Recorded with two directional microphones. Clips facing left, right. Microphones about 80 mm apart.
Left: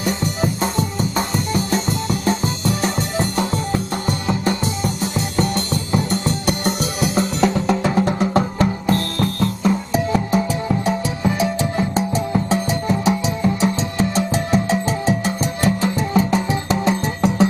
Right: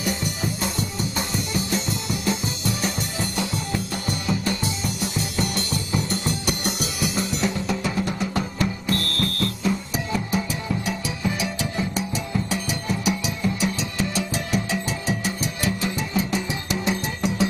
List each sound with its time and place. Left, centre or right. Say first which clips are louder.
1.1 s music: left 7 dB; left